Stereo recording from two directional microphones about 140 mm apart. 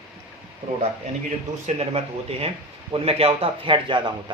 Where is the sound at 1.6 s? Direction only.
45° right (ahead or behind).